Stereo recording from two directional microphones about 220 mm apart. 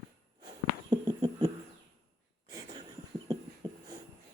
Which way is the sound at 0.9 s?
15° right (ahead or behind).